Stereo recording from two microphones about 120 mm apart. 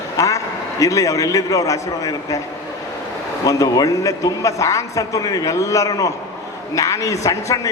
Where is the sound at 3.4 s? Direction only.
30° left (ahead or behind).